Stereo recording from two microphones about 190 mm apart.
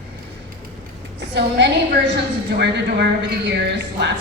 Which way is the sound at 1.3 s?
65° right (ahead or behind).